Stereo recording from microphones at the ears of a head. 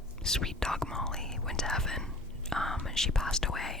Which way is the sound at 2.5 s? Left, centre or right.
Centre.